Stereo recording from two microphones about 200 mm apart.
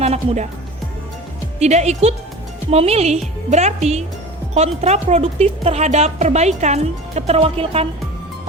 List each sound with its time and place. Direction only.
0.0 s speech: 30° right (ahead or behind)
1.5 s speech: 35° right (ahead or behind)